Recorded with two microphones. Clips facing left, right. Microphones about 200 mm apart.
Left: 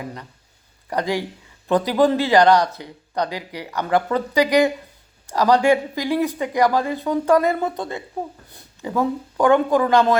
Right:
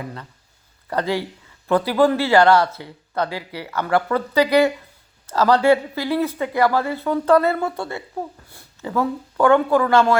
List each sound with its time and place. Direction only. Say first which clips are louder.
0.9 s speech: even; 15° left (ahead or behind)